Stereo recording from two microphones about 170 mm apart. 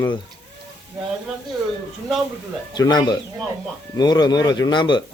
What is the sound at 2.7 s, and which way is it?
A man's voice, 25° left (ahead or behind).